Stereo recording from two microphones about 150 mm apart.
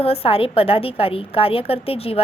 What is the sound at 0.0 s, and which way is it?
A woman's voice, 40° left (ahead or behind).